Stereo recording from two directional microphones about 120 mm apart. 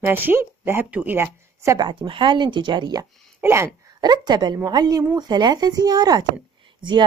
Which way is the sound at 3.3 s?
20° right (ahead or behind).